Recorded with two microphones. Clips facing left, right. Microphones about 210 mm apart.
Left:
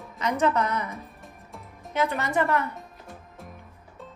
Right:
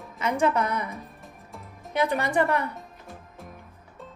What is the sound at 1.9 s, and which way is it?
Speech, 15° right (ahead or behind).